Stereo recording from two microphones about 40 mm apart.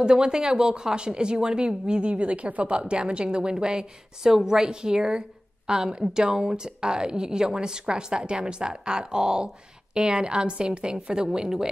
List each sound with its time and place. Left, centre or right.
0.0 s a woman's voice: right